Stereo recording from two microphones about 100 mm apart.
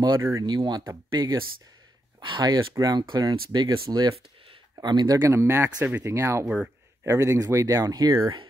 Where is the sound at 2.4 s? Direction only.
45° right (ahead or behind).